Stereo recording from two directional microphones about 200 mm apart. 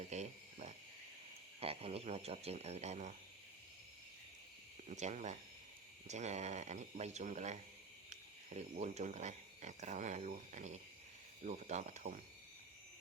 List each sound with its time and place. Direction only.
0.1 s a sound: 35° right (ahead or behind)
1.5 s speech: 30° right (ahead or behind)
4.9 s speech: 35° right (ahead or behind)